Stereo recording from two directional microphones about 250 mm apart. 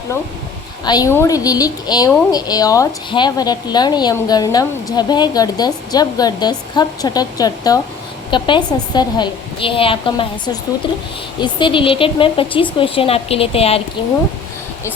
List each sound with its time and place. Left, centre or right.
0.9 s a woman's voice: centre